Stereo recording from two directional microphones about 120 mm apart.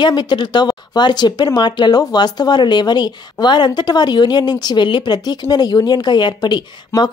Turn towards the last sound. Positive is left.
turn(degrees=25)  # may be behind; listen again after turning